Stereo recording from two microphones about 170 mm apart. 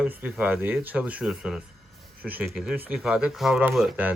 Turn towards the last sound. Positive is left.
turn(degrees=-5)  # may be behind; listen again after turning